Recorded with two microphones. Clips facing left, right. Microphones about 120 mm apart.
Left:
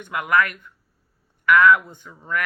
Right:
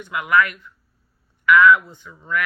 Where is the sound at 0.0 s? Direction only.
50° left (ahead or behind).